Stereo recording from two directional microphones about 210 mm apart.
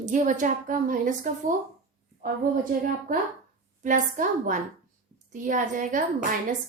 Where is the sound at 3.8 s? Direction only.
40° right (ahead or behind).